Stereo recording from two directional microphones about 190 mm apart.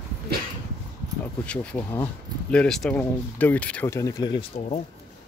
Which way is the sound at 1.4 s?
5° left (ahead or behind).